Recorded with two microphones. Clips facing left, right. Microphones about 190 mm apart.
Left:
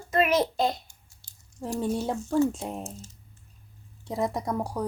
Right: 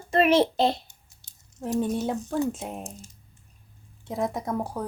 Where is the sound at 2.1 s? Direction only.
15° right (ahead or behind).